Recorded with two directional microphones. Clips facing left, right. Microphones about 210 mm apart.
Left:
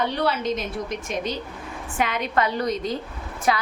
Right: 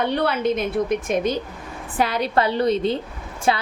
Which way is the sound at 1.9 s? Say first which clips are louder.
Right 3 dB; 35° right (ahead or behind).